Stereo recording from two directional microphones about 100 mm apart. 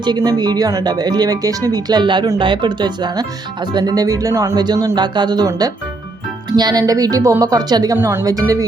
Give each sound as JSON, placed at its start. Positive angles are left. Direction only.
{"t": 0.0, "sound": "speech", "side_deg": -45}
{"t": 4.5, "sound": "speech", "side_deg": -45}
{"t": 7.9, "sound": "a woman's voice", "side_deg": -25}
{"t": 8.2, "sound": "speech", "side_deg": -40}